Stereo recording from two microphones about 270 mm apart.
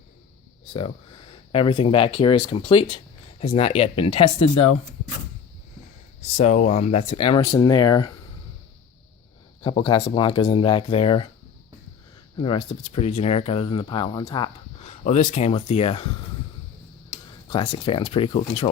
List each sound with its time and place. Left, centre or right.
0.7 s speech: centre
6.3 s speech: left
9.6 s speech: centre
12.4 s speech: left
17.5 s speech: centre